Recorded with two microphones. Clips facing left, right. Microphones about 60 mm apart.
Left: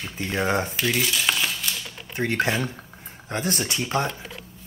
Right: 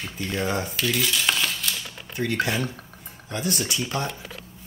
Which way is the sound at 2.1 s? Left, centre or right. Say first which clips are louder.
Left 1 dB; left.